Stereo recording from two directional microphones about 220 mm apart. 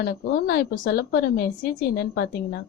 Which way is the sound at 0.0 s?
45° left (ahead or behind).